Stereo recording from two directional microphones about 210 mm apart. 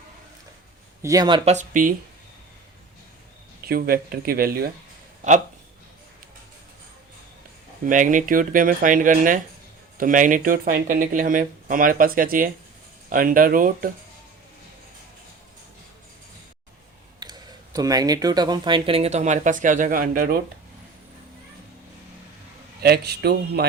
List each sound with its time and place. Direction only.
1.0 s speech: 15° right (ahead or behind)
1.5 s speech: 35° right (ahead or behind)
3.7 s speech: 45° right (ahead or behind)
7.9 s speech: 40° right (ahead or behind)
17.2 s speech: 20° right (ahead or behind); by 20.4 s 40° right (ahead or behind)
22.8 s speech: 50° right (ahead or behind)